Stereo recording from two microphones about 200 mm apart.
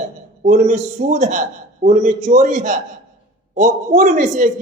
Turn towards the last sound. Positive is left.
turn(degrees=-40)  # may be behind; listen again after turning